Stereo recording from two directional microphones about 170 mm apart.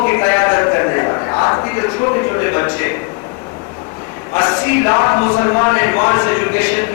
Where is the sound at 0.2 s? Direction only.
15° left (ahead or behind).